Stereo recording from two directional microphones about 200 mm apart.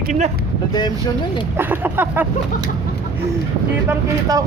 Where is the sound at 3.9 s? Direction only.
15° right (ahead or behind).